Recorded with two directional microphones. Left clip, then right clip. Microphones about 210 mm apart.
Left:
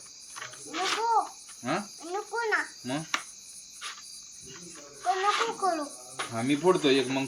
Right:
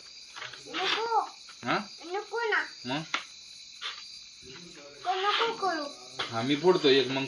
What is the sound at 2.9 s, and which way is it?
Speech, 30° left (ahead or behind).